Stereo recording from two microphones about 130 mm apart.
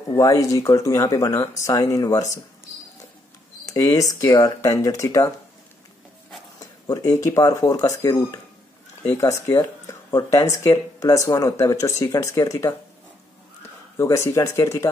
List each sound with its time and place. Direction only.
0.1 s speech: 25° left (ahead or behind)
3.6 s speech: 25° left (ahead or behind)
6.6 s a sound: 25° left (ahead or behind)
7.2 s speech: 25° left (ahead or behind)
13.9 s speech: 20° left (ahead or behind)